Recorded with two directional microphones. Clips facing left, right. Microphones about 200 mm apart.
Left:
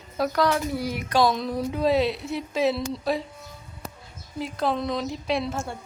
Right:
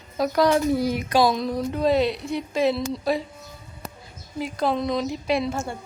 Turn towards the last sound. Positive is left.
turn(degrees=0)  # may be behind; listen again after turning